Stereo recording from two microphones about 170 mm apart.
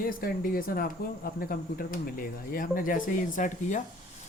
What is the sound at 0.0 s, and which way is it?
Speech, 55° left (ahead or behind).